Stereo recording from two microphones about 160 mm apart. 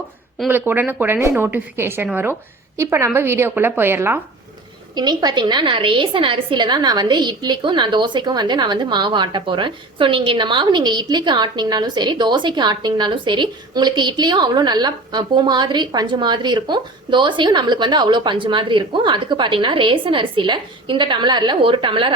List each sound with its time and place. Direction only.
0.3 s a woman's voice: 10° right (ahead or behind)
4.9 s a woman's voice: 25° right (ahead or behind)